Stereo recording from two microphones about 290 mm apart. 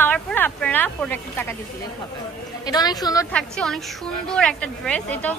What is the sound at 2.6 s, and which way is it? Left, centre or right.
A woman's voice, centre.